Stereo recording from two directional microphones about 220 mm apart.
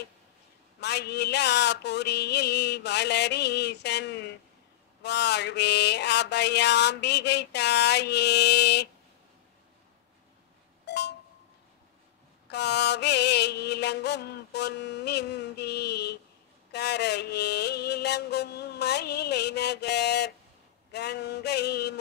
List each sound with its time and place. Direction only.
0.7 s mantra: 50° left (ahead or behind)
10.9 s a sound: 50° left (ahead or behind)
12.4 s mantra: 50° left (ahead or behind)